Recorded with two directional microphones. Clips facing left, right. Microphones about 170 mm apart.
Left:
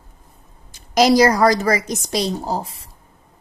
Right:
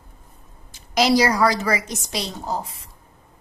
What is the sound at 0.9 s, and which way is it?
A woman's voice, 45° left (ahead or behind).